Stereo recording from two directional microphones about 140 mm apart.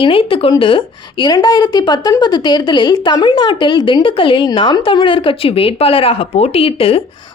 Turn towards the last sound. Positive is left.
turn(degrees=40)  # may be behind; listen again after turning